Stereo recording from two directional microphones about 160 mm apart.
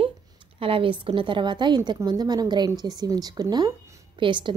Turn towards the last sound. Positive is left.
turn(degrees=-30)  # may be behind; listen again after turning